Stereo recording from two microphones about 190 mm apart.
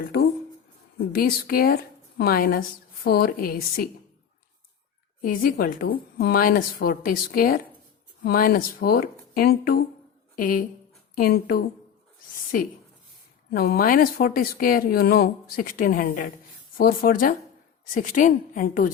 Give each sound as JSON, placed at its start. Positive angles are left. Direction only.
{"t": 1.1, "sound": "speech", "side_deg": 50}
{"t": 5.2, "sound": "speech", "side_deg": 50}
{"t": 13.5, "sound": "speech", "side_deg": 55}